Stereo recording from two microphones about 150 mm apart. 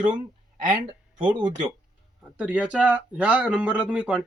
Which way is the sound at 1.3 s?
30° right (ahead or behind).